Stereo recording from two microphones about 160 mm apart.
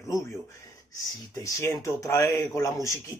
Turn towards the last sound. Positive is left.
turn(degrees=20)  # may be behind; listen again after turning